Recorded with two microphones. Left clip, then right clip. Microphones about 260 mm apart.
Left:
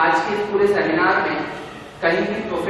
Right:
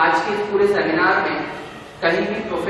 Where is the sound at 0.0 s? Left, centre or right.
Centre.